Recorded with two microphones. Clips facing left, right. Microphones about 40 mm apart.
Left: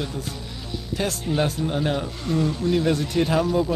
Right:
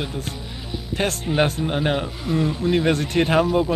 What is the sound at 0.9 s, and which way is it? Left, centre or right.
Speech, right.